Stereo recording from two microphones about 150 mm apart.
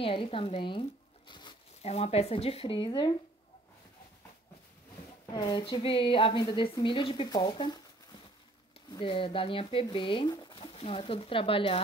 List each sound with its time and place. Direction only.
0.0 s speech: 40° left (ahead or behind)
1.8 s a woman's voice: 45° left (ahead or behind)
5.2 s a woman's voice: 25° left (ahead or behind)
8.9 s a woman's voice: 35° left (ahead or behind)